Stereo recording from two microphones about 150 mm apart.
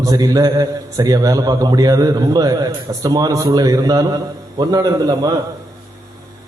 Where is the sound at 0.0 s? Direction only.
25° right (ahead or behind).